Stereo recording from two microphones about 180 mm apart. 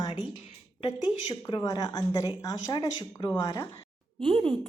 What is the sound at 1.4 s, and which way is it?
Speech, 20° left (ahead or behind).